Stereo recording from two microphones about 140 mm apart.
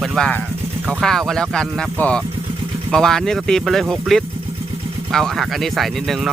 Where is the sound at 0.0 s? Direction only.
5° left (ahead or behind).